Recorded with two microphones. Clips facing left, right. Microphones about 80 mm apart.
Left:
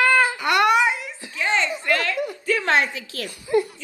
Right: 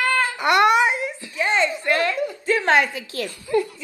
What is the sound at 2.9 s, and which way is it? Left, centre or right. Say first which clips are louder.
Speech: right 4 dB; right.